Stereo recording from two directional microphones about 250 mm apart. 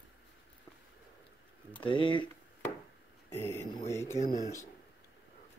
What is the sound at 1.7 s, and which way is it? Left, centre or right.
Speech, centre.